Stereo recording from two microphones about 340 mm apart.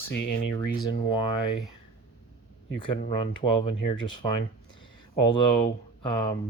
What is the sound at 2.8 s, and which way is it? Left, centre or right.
Speech, centre.